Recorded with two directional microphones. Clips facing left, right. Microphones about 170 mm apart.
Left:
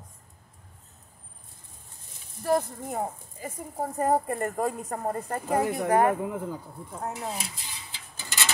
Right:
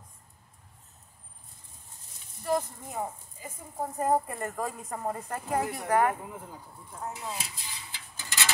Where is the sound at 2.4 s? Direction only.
55° left (ahead or behind).